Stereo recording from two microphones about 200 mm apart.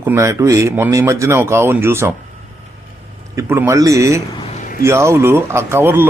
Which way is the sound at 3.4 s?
15° right (ahead or behind).